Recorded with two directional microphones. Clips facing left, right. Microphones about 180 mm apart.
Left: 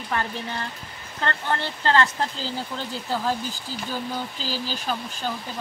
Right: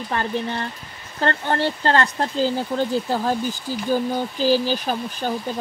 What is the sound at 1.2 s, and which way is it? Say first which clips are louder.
Speech: right 6 dB; 40° right (ahead or behind).